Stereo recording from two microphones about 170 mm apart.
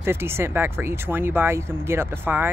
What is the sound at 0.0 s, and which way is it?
Speech, 15° right (ahead or behind).